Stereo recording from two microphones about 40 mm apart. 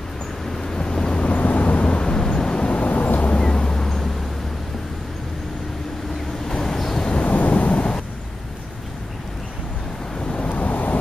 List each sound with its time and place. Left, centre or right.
0.6 s vehicle: centre
1.2 s vehicle: left
3.3 s vehicle: left
6.5 s vehicle: centre
7.2 s a sound: left
10.1 s vehicle: left
10.5 s vehicle: left